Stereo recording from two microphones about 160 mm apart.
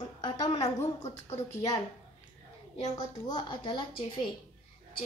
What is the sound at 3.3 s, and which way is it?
Speech, 30° left (ahead or behind).